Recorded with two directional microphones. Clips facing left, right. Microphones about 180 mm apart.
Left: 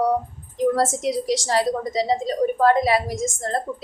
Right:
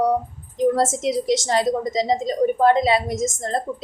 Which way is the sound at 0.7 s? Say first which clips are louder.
Right 1 dB; 25° right (ahead or behind).